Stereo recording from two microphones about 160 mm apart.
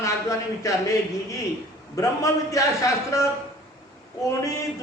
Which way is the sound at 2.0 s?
20° left (ahead or behind).